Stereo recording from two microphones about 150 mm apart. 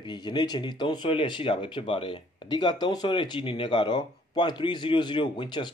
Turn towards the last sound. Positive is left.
turn(degrees=30)  # may be behind; listen again after turning